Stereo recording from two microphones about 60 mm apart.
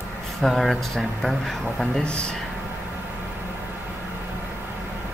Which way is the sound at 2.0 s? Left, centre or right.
Centre.